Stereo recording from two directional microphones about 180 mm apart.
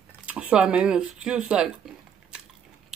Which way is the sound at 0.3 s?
5° right (ahead or behind).